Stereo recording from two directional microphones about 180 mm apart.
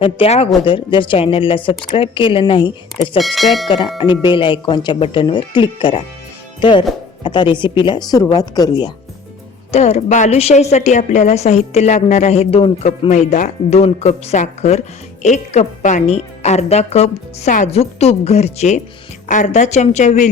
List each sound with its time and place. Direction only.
0.0 s speech: 30° left (ahead or behind)
3.2 s speech: centre (ahead or behind)
4.0 s speech: 30° left (ahead or behind)
9.7 s a woman's voice: 35° left (ahead or behind)